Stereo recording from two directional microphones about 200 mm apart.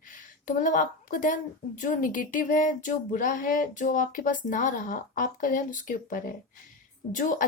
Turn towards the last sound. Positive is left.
turn(degrees=40)  # may be behind; listen again after turning